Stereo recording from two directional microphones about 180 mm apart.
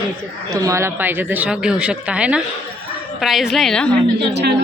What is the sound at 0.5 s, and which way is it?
A woman's voice, 15° right (ahead or behind).